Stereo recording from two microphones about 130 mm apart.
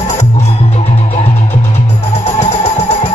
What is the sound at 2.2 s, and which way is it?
Music, 55° left (ahead or behind).